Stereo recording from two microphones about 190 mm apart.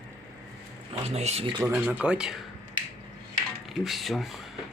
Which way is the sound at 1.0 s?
35° right (ahead or behind).